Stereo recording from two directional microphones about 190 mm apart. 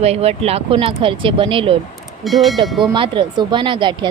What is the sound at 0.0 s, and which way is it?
A woman's voice, 35° right (ahead or behind).